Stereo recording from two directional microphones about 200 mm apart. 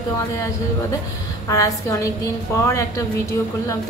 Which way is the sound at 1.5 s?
15° left (ahead or behind).